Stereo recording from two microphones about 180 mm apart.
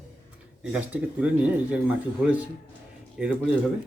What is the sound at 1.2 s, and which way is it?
Speech, 5° right (ahead or behind).